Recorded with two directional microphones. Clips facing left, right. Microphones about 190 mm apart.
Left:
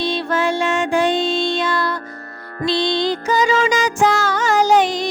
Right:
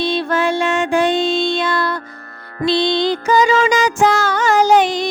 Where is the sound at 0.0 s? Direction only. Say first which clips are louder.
Right 2 dB; 60° right (ahead or behind).